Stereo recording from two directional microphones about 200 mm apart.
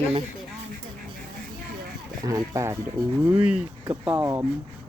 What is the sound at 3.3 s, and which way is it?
Speech, 5° right (ahead or behind).